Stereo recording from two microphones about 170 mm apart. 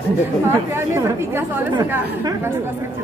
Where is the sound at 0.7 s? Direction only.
15° right (ahead or behind).